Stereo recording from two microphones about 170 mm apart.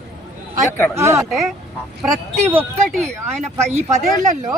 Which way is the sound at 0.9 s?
15° right (ahead or behind).